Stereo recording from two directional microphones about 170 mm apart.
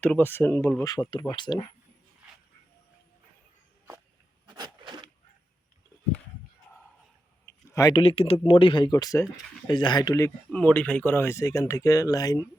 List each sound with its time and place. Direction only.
0.0 s speech: 10° left (ahead or behind)
0.9 s speech: 25° left (ahead or behind)
4.4 s a sound: 25° right (ahead or behind)
7.7 s speech: 20° left (ahead or behind)